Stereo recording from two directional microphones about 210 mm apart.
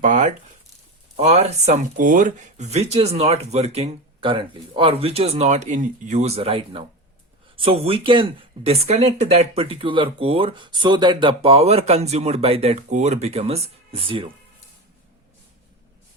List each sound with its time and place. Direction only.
0.0 s speech: 40° right (ahead or behind)